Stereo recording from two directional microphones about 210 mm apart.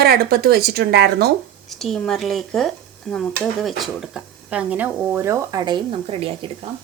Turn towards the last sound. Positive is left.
turn(degrees=-25)  # may be behind; listen again after turning